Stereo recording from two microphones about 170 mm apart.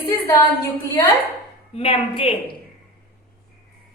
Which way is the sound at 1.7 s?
35° left (ahead or behind).